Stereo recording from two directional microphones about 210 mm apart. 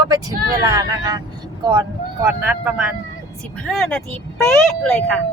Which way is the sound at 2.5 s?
5° right (ahead or behind).